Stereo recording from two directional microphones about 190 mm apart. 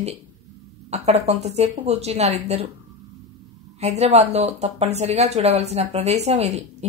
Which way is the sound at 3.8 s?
35° right (ahead or behind).